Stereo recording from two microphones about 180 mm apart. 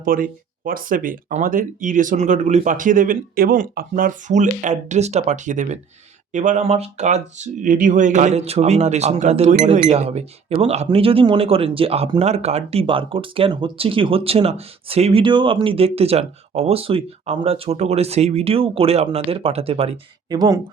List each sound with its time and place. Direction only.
0.0 s speech: 50° right (ahead or behind); by 20.6 s 25° right (ahead or behind)